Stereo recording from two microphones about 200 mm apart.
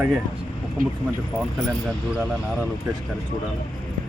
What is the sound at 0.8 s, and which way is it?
Speech, 45° right (ahead or behind).